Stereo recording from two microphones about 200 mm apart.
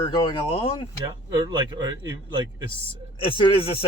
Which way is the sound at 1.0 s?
20° right (ahead or behind).